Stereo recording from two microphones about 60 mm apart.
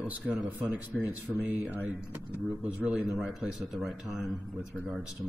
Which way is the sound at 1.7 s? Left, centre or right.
Right.